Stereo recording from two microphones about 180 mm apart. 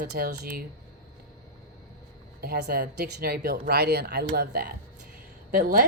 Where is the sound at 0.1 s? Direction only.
60° right (ahead or behind).